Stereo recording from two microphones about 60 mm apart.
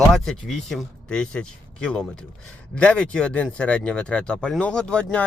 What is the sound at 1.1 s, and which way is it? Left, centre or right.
Speech, centre.